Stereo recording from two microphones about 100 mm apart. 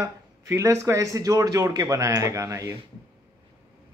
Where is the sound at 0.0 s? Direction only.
30° right (ahead or behind).